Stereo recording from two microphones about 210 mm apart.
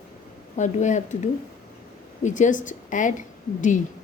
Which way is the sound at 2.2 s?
35° left (ahead or behind).